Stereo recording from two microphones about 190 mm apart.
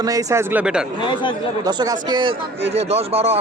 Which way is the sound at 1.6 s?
20° right (ahead or behind).